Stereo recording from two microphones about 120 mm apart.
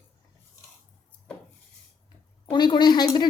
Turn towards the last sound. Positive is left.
turn(degrees=35)  # may be behind; listen again after turning